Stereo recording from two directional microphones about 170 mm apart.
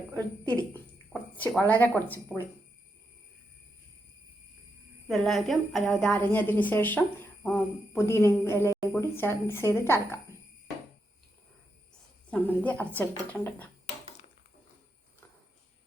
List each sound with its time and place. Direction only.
0.2 s speech: 10° left (ahead or behind)
5.0 s a woman's voice: centre (ahead or behind)
12.3 s a woman's voice: 10° left (ahead or behind)